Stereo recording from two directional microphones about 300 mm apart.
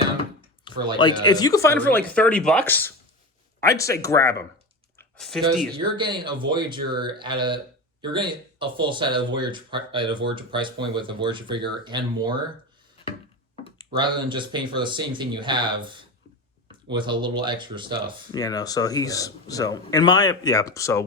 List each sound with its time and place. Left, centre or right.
0.9 s speech: centre
4.9 s a sound: centre
5.7 s speech: centre
13.9 s speech: centre
18.3 s speech: centre